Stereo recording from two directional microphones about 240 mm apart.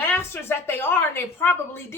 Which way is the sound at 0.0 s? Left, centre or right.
Centre.